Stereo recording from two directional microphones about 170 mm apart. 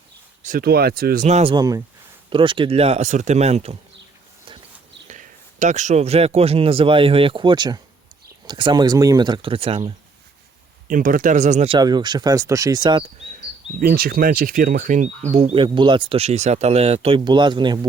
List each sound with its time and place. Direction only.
0.4 s speech: 60° right (ahead or behind); by 1.5 s 40° right (ahead or behind)
1.5 s speech: 20° right (ahead or behind); by 3.8 s 40° right (ahead or behind)
5.0 s speech: 45° right (ahead or behind)
10.8 s speech: 55° right (ahead or behind)
11.8 s speech: 25° right (ahead or behind)
13.7 s speech: 60° right (ahead or behind); by 17.7 s 25° right (ahead or behind)